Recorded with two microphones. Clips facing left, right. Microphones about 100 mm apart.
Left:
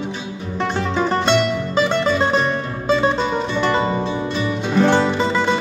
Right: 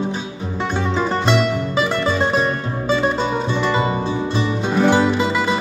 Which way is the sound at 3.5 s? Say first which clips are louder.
Left 2 dB; 5° right (ahead or behind).